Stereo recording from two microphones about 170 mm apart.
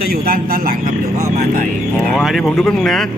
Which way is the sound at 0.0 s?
60° right (ahead or behind).